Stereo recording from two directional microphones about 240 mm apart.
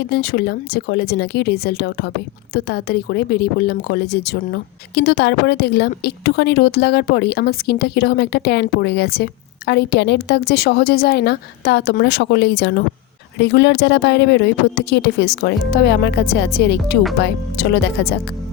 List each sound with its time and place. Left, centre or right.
0.0 s speech: left